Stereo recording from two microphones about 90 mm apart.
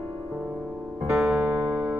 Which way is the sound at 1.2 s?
5° right (ahead or behind).